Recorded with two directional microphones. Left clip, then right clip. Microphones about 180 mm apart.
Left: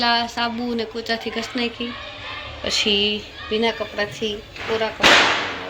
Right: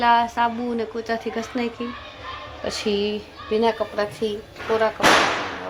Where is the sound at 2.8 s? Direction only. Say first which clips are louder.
Left 4 dB; 40° right (ahead or behind).